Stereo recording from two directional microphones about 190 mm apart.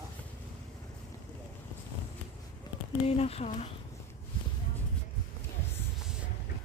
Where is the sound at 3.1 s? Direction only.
30° left (ahead or behind).